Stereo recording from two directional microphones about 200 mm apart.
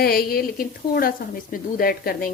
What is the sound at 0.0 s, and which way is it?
Speech, 50° left (ahead or behind).